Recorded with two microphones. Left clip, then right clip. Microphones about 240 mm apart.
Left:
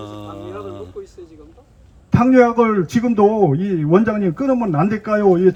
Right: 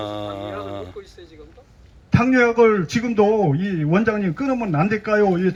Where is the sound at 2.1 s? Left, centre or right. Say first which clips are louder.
Left 3 dB; centre.